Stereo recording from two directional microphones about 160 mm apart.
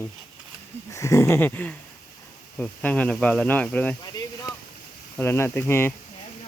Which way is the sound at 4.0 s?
25° left (ahead or behind).